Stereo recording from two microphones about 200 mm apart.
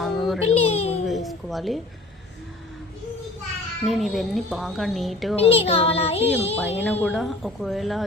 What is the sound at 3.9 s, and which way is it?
Speech, centre (ahead or behind).